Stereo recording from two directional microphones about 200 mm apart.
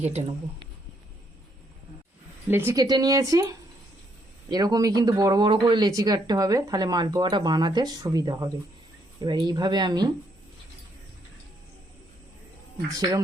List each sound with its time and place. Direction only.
0.0 s speech: 30° right (ahead or behind)
2.5 s speech: 10° right (ahead or behind)
12.9 s speech: 15° right (ahead or behind)